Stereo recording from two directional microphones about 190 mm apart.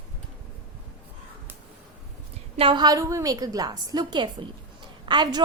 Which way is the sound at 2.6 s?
25° right (ahead or behind).